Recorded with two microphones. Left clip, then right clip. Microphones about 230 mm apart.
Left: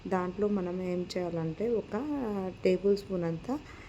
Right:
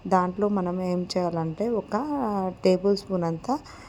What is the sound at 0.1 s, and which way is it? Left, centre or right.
A woman's voice, right.